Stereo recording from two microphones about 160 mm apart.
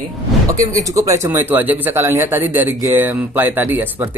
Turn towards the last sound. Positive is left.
turn(degrees=-10)  # may be behind; listen again after turning